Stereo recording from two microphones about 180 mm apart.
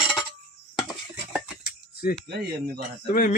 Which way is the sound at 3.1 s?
55° left (ahead or behind).